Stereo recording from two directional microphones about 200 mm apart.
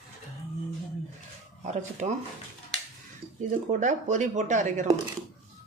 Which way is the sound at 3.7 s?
40° right (ahead or behind).